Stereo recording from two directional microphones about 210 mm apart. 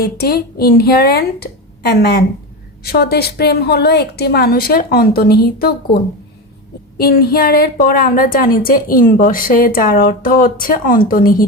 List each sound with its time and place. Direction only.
0.0 s a woman's voice: 50° left (ahead or behind)